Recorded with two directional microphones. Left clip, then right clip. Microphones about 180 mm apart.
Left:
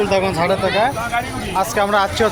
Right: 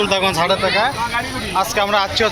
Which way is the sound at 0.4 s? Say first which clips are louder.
Even; 15° left (ahead or behind).